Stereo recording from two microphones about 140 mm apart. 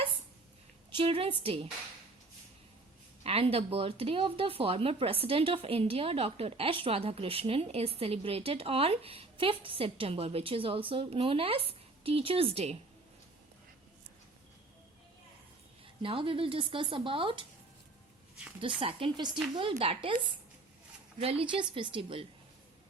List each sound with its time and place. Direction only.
0.9 s speech: 40° right (ahead or behind)
3.2 s speech: 45° right (ahead or behind)
16.0 s speech: 40° right (ahead or behind)
18.8 s speech: 40° right (ahead or behind)
21.2 s speech: 45° right (ahead or behind)